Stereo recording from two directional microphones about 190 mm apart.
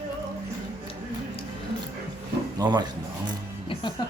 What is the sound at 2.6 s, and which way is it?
Speech, 20° right (ahead or behind).